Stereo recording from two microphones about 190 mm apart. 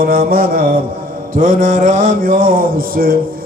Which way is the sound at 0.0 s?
50° right (ahead or behind).